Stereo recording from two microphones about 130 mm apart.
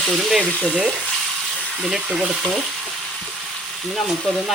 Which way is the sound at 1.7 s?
5° right (ahead or behind).